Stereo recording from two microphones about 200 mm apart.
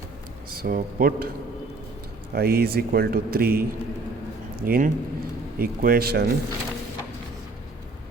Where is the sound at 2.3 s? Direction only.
50° right (ahead or behind).